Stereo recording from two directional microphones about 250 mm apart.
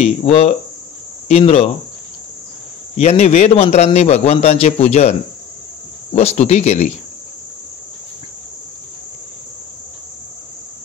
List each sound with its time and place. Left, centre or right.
0.0 s a man's voice: left
3.0 s a man's voice: left
6.1 s a man's voice: left